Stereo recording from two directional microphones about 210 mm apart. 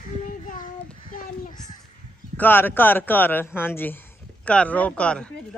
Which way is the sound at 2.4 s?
10° left (ahead or behind).